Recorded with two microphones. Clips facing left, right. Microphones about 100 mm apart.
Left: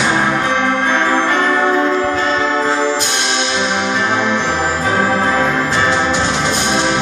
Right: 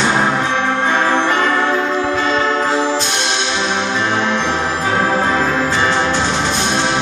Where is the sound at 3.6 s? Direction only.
10° left (ahead or behind).